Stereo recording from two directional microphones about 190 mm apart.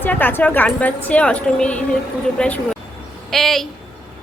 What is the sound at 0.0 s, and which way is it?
A woman's voice, 10° left (ahead or behind).